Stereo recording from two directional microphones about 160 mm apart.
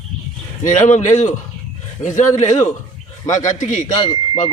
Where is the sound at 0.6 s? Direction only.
50° left (ahead or behind).